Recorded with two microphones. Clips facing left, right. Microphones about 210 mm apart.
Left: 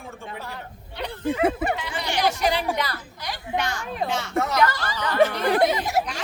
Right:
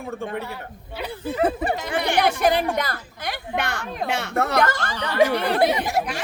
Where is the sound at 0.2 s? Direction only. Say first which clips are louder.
Right 8 dB; 60° right (ahead or behind).